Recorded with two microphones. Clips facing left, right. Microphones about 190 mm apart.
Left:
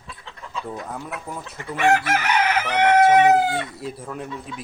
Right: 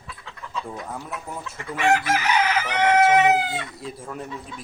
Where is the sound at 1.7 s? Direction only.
55° left (ahead or behind).